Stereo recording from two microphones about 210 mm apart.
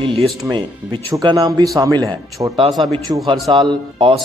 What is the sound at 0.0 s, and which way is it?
A man's voice, 25° right (ahead or behind).